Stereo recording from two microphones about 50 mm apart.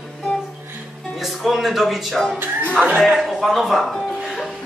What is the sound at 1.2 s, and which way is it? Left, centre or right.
Speech, centre.